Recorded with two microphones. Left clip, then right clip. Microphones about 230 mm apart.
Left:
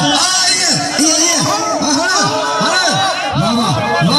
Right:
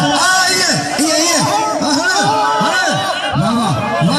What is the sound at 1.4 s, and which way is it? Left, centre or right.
Music, centre.